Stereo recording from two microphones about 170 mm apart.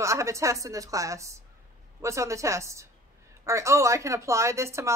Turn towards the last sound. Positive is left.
turn(degrees=-15)  # may be behind; listen again after turning